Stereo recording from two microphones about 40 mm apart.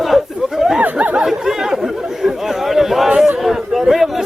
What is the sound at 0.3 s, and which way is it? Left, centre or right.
Chatter, centre.